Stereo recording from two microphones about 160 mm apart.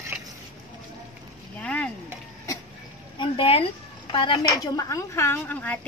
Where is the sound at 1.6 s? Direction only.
5° left (ahead or behind).